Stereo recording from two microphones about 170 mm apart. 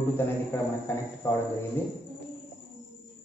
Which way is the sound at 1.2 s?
15° left (ahead or behind).